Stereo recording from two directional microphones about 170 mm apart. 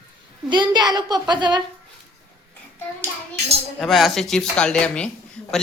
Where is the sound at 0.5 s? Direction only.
25° right (ahead or behind).